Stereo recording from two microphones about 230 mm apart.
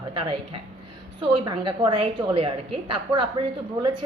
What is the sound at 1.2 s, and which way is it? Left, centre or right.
Speech, right.